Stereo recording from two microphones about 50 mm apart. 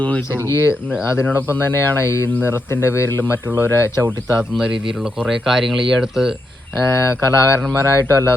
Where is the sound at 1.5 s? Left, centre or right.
Left.